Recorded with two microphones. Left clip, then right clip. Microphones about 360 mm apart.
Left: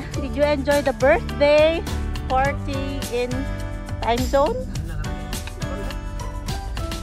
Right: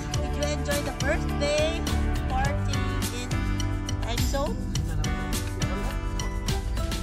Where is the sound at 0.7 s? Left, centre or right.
Centre.